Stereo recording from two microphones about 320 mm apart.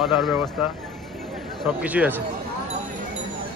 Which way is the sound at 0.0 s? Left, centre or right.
Centre.